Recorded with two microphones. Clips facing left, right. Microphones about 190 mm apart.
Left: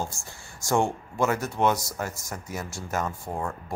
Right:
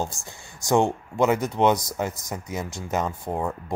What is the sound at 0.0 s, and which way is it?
Speech, 20° right (ahead or behind).